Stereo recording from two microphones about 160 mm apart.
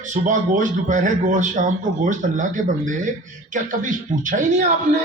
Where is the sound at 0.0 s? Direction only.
50° right (ahead or behind).